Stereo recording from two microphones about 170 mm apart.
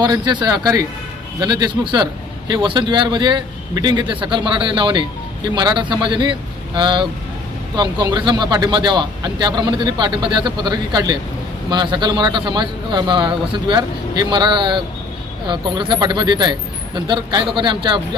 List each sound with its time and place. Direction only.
0.0 s speech: 25° right (ahead or behind)